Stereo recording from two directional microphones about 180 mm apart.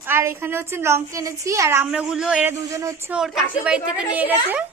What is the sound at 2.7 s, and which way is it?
Speech, 15° right (ahead or behind).